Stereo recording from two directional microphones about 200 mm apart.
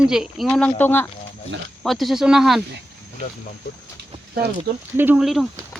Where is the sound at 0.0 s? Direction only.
5° right (ahead or behind).